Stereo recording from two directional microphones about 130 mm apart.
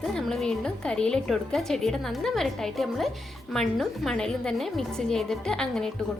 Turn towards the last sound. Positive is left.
turn(degrees=5)  # may be behind; listen again after turning